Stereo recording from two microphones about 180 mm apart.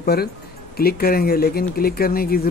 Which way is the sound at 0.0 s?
60° left (ahead or behind).